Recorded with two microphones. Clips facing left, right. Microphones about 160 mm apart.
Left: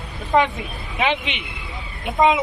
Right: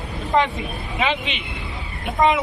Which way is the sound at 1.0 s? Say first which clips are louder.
Left 1 dB; 15° left (ahead or behind).